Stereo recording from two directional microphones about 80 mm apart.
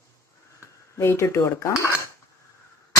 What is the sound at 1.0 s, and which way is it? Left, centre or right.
Speech, left.